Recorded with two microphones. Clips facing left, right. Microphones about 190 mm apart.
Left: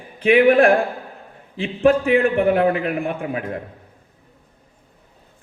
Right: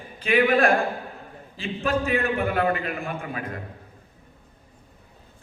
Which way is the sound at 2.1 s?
55° left (ahead or behind).